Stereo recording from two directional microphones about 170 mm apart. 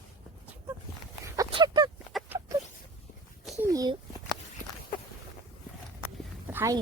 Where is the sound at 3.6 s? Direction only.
20° right (ahead or behind).